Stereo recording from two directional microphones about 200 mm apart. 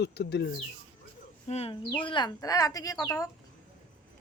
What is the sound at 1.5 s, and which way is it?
Speech, 30° left (ahead or behind).